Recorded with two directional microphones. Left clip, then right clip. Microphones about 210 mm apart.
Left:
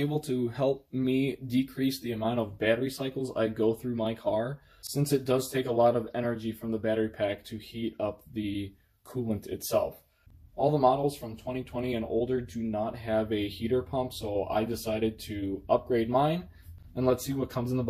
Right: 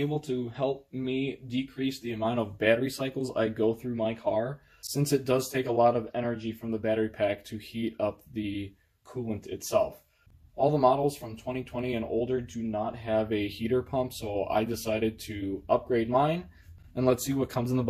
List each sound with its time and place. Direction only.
0.2 s speech: 20° left (ahead or behind)
2.2 s speech: 5° right (ahead or behind)
2.7 s speech: 15° right (ahead or behind); by 4.5 s 5° left (ahead or behind)
4.8 s speech: 10° right (ahead or behind)
8.3 s speech: 5° right (ahead or behind)
9.1 s speech: 15° left (ahead or behind)
10.6 s speech: 10° right (ahead or behind)
13.3 s speech: 15° right (ahead or behind)
16.9 s speech: 20° right (ahead or behind)